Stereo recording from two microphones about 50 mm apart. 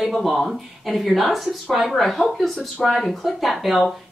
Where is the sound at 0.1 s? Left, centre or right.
Centre.